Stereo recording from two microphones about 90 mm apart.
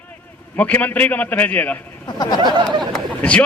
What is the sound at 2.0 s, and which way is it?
Speech, 50° left (ahead or behind).